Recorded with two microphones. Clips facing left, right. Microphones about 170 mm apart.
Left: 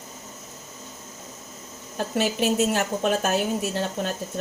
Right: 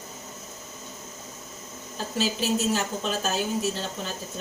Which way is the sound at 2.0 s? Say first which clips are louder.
Left 4 dB; 60° left (ahead or behind).